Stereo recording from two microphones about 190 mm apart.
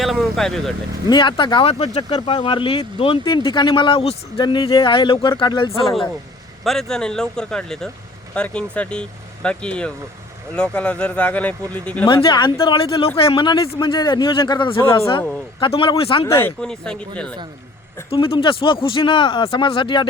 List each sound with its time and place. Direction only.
0.0 s speech: centre (ahead or behind)
1.1 s speech: 25° left (ahead or behind)
6.7 s speech: centre (ahead or behind)
12.0 s speech: 25° left (ahead or behind)
16.4 s speech: 5° left (ahead or behind)
18.1 s speech: 30° left (ahead or behind)